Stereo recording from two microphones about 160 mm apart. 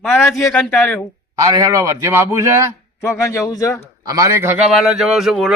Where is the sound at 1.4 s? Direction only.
20° right (ahead or behind).